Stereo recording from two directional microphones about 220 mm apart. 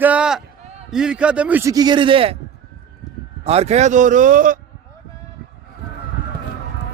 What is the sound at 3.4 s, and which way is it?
A man's voice, 30° right (ahead or behind).